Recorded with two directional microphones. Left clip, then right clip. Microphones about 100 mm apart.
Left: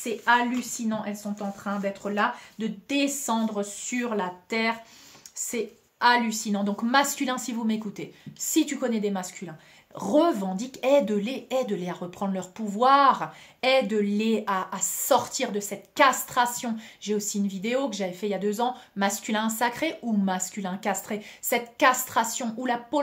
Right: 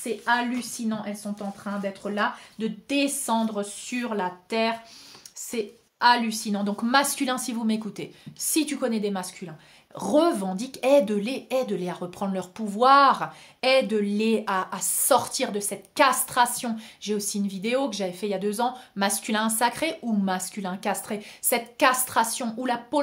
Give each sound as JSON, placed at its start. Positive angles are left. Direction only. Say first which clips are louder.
{"t": 0.6, "sound": "speech", "louder": "left 1 dB", "side_deg": -15}